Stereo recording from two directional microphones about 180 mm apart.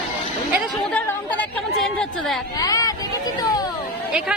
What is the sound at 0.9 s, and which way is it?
Chatter, 10° left (ahead or behind).